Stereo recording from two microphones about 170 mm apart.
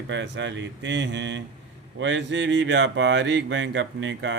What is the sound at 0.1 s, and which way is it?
Speech, 90° right.